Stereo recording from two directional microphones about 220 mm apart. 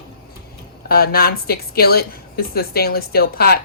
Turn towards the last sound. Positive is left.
turn(degrees=45)  # may be behind; listen again after turning